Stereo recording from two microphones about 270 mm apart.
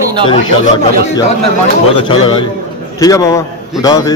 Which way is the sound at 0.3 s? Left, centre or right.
Left.